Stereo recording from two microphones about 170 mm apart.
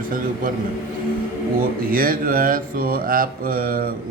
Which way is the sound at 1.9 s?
55° right (ahead or behind).